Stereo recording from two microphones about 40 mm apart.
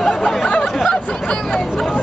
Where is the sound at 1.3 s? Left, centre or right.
Centre.